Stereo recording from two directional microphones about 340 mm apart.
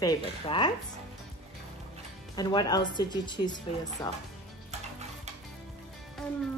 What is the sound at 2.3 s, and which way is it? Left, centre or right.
Speech, centre.